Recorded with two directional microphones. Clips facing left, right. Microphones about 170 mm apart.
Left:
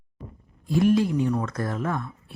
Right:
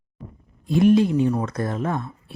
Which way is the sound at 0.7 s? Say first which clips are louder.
Right 4 dB; 20° right (ahead or behind).